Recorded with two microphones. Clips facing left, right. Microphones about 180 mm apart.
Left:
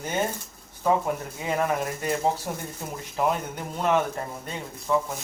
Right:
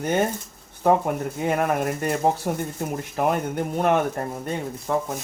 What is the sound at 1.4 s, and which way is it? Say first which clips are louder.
Speech: right 4 dB; 55° right (ahead or behind).